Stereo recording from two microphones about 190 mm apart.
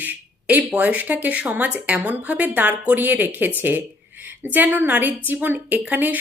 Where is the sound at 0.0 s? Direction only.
10° right (ahead or behind).